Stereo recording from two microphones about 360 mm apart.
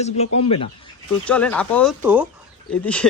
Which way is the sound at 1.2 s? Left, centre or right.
Centre.